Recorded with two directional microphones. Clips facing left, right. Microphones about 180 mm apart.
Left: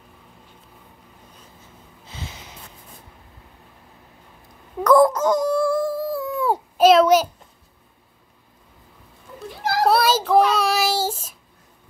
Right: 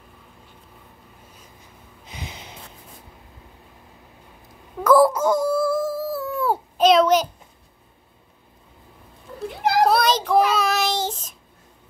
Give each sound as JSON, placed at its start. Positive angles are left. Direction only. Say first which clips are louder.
{"t": 2.0, "sound": "snort", "louder": "even", "side_deg": -15}
{"t": 4.8, "sound": "wail", "louder": "left 1 dB", "side_deg": -5}
{"t": 6.2, "sound": "a sound", "louder": "left 1 dB", "side_deg": 15}
{"t": 9.6, "sound": "children playing", "louder": "right 4 dB", "side_deg": -15}
{"t": 9.8, "sound": "child singing", "louder": "left 1 dB", "side_deg": 5}